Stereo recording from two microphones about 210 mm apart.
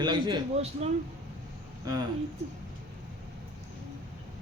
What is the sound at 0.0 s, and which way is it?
Speech, 20° right (ahead or behind).